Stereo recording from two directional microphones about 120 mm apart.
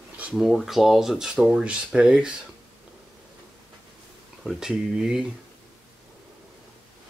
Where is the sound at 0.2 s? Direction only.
5° right (ahead or behind).